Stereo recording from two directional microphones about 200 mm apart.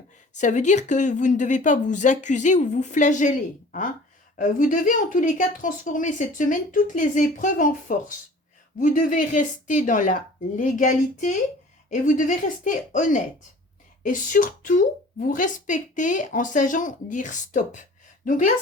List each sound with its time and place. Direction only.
0.3 s speech: 35° left (ahead or behind)